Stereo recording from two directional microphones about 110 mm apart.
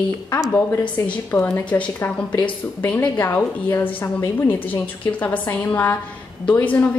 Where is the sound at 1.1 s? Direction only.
20° left (ahead or behind).